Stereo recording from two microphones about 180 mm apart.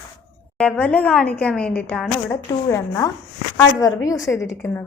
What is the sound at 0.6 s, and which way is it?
A woman's voice, 5° left (ahead or behind).